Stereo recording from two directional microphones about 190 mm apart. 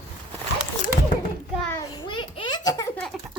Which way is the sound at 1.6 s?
15° left (ahead or behind).